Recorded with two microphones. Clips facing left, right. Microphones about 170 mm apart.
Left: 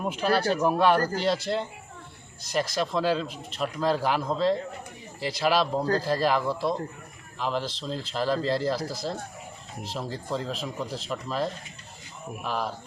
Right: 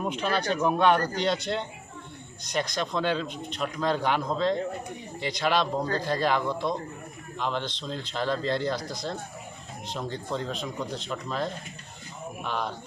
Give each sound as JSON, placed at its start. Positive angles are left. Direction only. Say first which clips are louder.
{"t": 0.0, "sound": "speech", "louder": "left 3 dB", "side_deg": 5}